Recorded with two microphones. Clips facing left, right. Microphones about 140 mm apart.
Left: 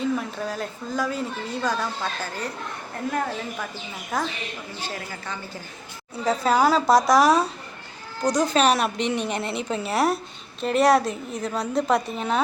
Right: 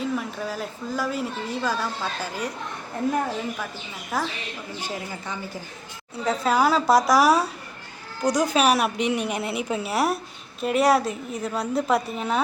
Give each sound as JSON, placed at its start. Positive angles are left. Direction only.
{"t": 0.0, "sound": "a woman's voice", "side_deg": -5}
{"t": 4.1, "sound": "a woman's voice", "side_deg": -5}
{"t": 4.8, "sound": "a woman's voice", "side_deg": -15}
{"t": 6.2, "sound": "a woman's voice", "side_deg": 0}